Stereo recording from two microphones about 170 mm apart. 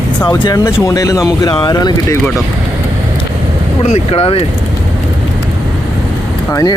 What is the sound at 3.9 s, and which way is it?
Speech, 40° left (ahead or behind).